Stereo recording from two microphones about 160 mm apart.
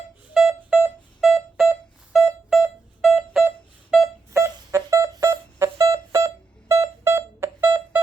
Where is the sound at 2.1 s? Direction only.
Centre (ahead or behind).